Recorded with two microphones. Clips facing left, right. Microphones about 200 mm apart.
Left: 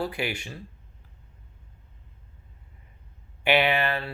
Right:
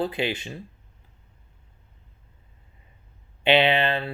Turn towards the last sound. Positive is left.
turn(degrees=-20)  # may be behind; listen again after turning